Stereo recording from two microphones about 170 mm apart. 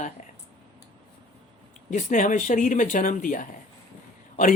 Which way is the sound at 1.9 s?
45° left (ahead or behind).